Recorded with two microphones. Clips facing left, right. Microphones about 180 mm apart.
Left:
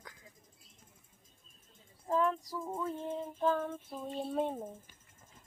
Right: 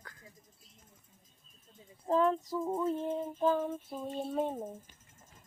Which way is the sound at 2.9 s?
10° right (ahead or behind).